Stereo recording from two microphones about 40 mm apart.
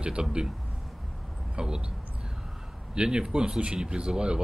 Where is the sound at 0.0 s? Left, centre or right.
Right.